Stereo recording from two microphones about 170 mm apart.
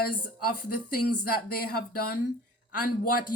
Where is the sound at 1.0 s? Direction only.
65° left (ahead or behind).